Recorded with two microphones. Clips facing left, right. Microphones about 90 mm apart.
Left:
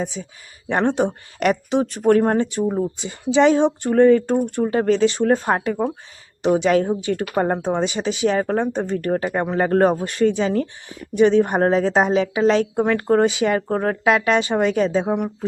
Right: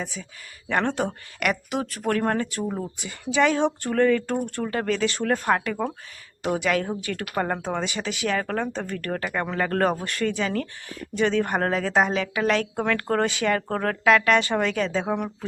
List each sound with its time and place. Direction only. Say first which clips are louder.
0.0 s a woman's voice: left 7 dB; 25° left (ahead or behind)